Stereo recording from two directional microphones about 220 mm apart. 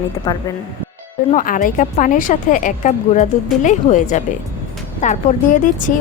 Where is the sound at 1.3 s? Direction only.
35° left (ahead or behind).